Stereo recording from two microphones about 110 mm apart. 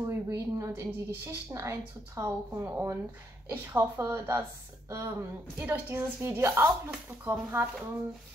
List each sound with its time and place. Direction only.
0.0 s speech: 30° right (ahead or behind)